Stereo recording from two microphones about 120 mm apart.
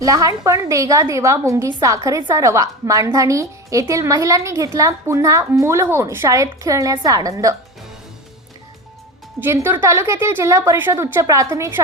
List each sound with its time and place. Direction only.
0.0 s a woman's voice: 30° right (ahead or behind)
9.4 s a woman's voice: 20° right (ahead or behind)